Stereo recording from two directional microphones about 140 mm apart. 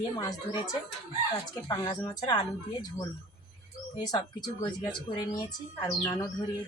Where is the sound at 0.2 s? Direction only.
30° left (ahead or behind).